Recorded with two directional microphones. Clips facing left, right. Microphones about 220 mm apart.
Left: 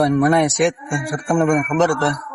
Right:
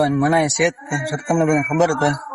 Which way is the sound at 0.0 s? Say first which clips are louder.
Left 1 dB; centre (ahead or behind).